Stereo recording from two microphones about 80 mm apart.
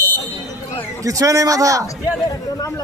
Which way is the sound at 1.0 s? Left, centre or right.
Right.